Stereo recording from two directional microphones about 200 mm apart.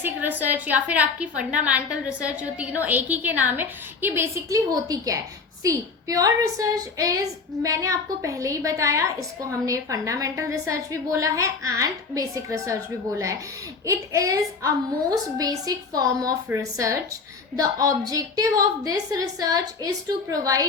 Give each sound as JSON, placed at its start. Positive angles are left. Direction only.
{"t": 0.0, "sound": "a woman's voice", "side_deg": -10}